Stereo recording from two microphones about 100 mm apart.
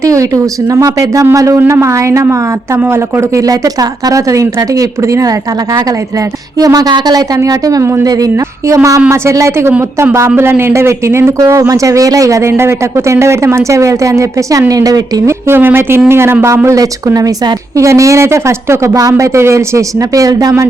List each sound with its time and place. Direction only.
0.0 s a woman's voice: 35° right (ahead or behind)
15.4 s a woman's voice: 20° right (ahead or behind)